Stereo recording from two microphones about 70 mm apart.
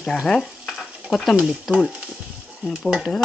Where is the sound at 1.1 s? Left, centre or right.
Centre.